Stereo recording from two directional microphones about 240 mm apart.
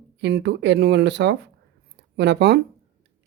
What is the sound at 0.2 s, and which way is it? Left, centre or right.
Speech, right.